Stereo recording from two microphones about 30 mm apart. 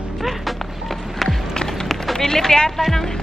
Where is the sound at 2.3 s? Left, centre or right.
Centre.